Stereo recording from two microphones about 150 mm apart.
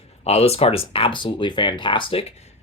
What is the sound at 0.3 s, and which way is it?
Speech, 45° left (ahead or behind).